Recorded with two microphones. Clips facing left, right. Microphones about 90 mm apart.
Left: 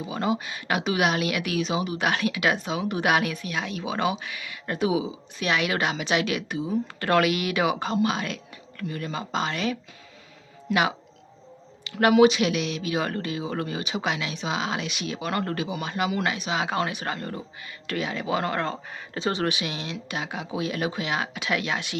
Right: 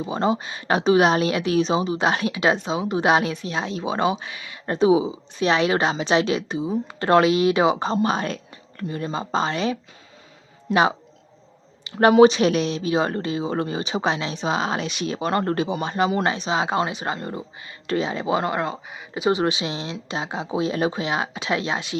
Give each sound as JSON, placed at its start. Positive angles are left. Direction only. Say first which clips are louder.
{"t": 0.0, "sound": "speech", "louder": "right 4 dB", "side_deg": -30}
{"t": 18.6, "sound": "speech", "louder": "right 2 dB", "side_deg": -10}